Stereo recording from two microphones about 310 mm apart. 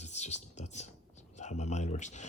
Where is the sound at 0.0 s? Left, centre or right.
Left.